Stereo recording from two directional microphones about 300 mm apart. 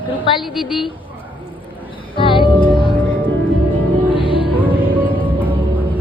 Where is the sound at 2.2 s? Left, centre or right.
Centre.